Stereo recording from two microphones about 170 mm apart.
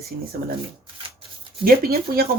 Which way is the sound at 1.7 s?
60° right (ahead or behind).